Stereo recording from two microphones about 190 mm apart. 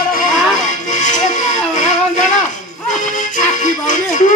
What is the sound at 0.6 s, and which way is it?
Music, 40° left (ahead or behind).